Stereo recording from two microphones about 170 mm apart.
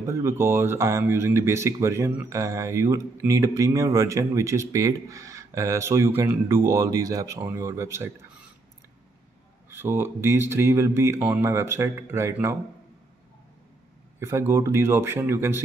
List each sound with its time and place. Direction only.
0.0 s speech: 15° right (ahead or behind)
9.7 s speech: 15° right (ahead or behind)
14.2 s speech: 15° right (ahead or behind)